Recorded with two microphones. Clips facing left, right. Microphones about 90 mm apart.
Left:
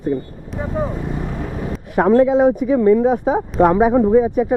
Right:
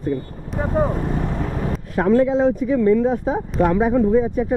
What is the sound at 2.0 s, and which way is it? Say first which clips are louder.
Speech: left 4 dB; 30° left (ahead or behind).